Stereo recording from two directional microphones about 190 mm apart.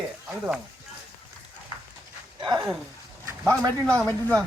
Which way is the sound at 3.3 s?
15° right (ahead or behind).